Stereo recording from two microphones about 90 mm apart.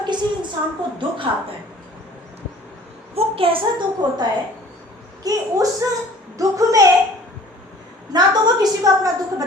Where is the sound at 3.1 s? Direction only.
90° right.